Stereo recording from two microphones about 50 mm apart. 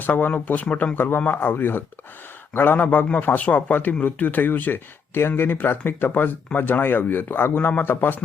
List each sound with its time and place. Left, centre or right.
0.0 s speech: left